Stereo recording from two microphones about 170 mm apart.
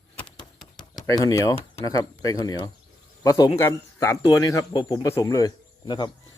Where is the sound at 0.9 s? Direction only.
20° left (ahead or behind).